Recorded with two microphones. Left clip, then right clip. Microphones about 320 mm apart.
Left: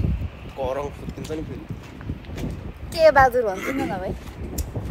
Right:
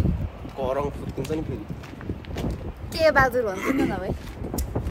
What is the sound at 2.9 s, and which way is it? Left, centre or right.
Speech, centre.